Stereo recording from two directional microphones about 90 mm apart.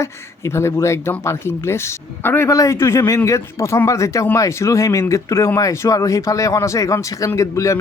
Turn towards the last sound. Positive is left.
turn(degrees=35)  # may be behind; listen again after turning